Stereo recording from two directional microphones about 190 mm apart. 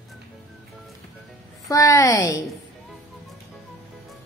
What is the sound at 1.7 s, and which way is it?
Speech, 15° left (ahead or behind).